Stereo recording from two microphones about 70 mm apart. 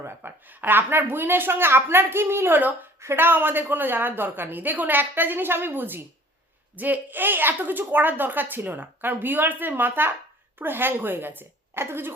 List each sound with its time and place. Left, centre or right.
0.0 s a woman's voice: right